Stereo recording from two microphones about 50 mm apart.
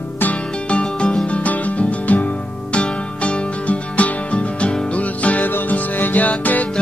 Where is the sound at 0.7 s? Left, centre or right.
Left.